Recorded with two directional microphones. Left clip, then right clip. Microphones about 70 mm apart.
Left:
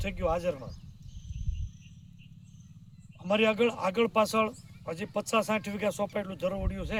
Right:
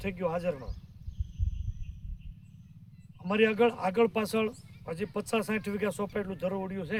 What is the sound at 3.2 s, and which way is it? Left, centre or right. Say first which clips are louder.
A man's voice: even; right.